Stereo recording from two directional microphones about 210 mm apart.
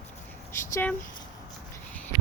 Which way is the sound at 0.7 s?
10° left (ahead or behind).